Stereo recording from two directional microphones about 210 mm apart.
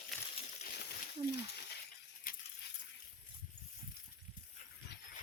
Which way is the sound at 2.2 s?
40° left (ahead or behind).